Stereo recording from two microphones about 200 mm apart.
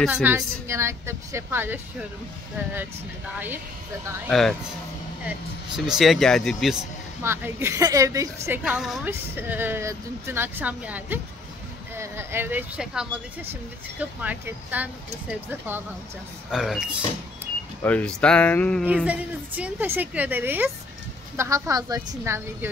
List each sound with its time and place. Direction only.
0.0 s speech: 10° right (ahead or behind)
3.3 s speech: 10° right (ahead or behind)
4.3 s speech: centre (ahead or behind)
5.9 s speech: centre (ahead or behind)
7.2 s speech: 10° right (ahead or behind)
8.6 s speech: centre (ahead or behind)
19.0 s speech: 5° right (ahead or behind)